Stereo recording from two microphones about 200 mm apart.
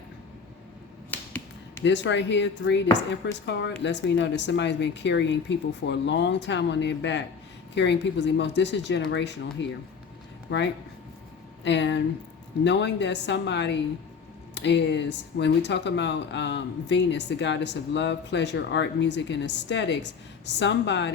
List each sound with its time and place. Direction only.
1.1 s finger snapping: 10° left (ahead or behind)
1.8 s speech: 65° left (ahead or behind)